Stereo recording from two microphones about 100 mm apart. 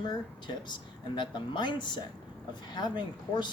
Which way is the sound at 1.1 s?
50° left (ahead or behind).